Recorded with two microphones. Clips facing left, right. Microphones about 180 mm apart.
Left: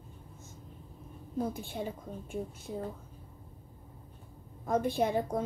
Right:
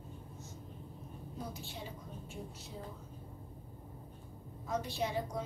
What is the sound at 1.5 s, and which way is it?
Speech, 50° left (ahead or behind).